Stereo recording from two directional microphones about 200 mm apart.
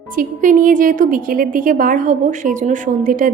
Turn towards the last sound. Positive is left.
turn(degrees=-40)  # may be behind; listen again after turning